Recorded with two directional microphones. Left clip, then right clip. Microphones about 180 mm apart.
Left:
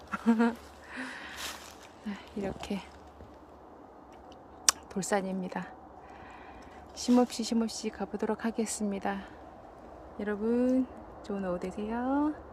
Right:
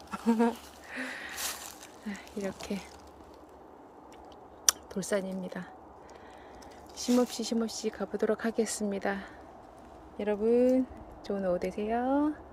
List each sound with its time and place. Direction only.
0.1 s a sound: centre (ahead or behind)
1.4 s boat: 75° right (ahead or behind)
2.0 s speech: centre (ahead or behind)
4.6 s speech: 5° left (ahead or behind)
6.9 s speech: 5° left (ahead or behind)